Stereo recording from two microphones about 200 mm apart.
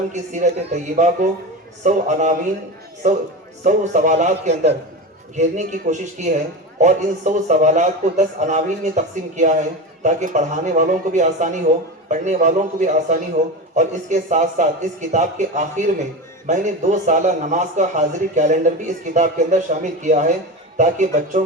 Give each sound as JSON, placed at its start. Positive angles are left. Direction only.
{"t": 0.1, "sound": "a man's voice", "side_deg": -35}